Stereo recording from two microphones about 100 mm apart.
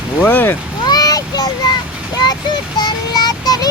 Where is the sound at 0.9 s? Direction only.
40° left (ahead or behind).